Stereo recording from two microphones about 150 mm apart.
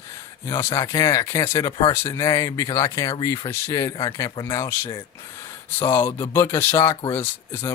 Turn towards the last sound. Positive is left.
turn(degrees=15)  # may be behind; listen again after turning